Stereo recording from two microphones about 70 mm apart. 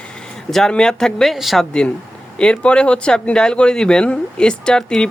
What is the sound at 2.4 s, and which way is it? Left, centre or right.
Speech, centre.